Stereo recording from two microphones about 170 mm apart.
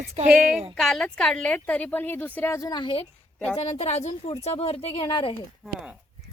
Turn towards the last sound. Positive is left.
turn(degrees=-5)  # may be behind; listen again after turning